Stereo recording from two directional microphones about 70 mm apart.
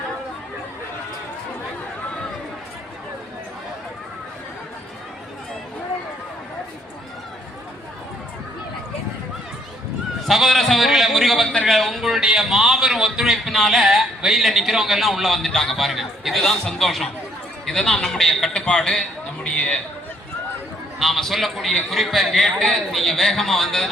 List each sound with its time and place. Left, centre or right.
10.2 s a man's voice: centre
19.5 s a sound: centre
21.0 s a man's voice: centre